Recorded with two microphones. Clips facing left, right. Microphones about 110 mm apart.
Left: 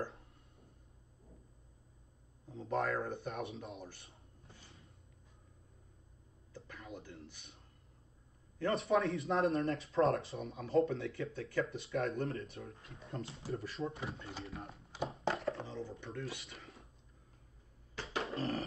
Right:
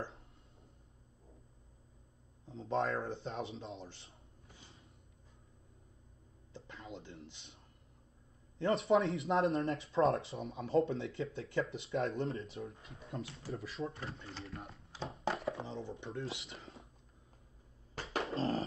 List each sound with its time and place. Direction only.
2.4 s speech: 25° right (ahead or behind)
4.6 s a sound: 25° right (ahead or behind)
6.5 s speech: 20° right (ahead or behind)
8.5 s speech: 25° right (ahead or behind)
12.9 s speech: centre (ahead or behind)
13.2 s speech: 30° left (ahead or behind)
13.5 s speech: centre (ahead or behind)
15.6 s speech: 25° right (ahead or behind)
18.3 s dog: 30° right (ahead or behind)